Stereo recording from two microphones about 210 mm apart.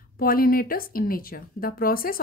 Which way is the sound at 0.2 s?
45° left (ahead or behind).